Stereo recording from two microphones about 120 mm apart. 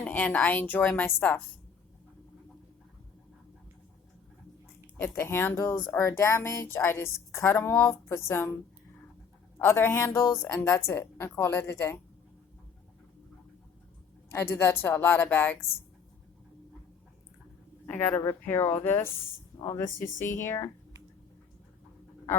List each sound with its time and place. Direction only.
0.0 s a woman's voice: 15° left (ahead or behind)
4.9 s speech: 15° left (ahead or behind)
9.6 s speech: 20° left (ahead or behind)
14.3 s a woman's voice: 20° left (ahead or behind)
17.8 s a woman's voice: 15° left (ahead or behind)